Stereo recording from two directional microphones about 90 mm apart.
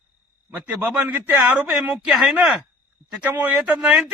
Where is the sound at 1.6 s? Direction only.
5° right (ahead or behind).